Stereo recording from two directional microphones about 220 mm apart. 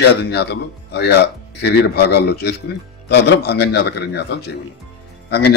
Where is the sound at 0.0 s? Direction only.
50° left (ahead or behind).